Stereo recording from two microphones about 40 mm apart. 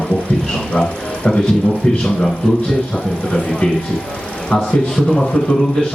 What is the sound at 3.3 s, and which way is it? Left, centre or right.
A man's voice, left.